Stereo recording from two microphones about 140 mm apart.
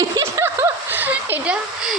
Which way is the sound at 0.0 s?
20° right (ahead or behind).